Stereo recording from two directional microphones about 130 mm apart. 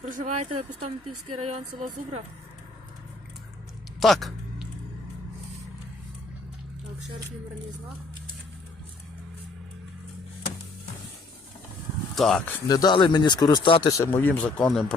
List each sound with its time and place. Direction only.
0.2 s speech: 60° right (ahead or behind)
4.0 s a sound: centre (ahead or behind)
12.1 s speech: centre (ahead or behind)
12.6 s speech: 30° left (ahead or behind)
13.9 s speech: 20° left (ahead or behind); by 14.9 s centre (ahead or behind)